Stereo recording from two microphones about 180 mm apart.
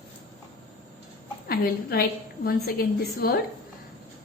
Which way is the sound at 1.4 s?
60° left (ahead or behind).